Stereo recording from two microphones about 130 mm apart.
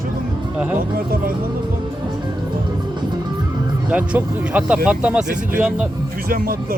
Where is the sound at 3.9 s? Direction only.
10° right (ahead or behind).